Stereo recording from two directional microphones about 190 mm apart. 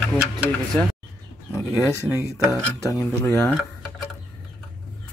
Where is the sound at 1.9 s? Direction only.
15° left (ahead or behind).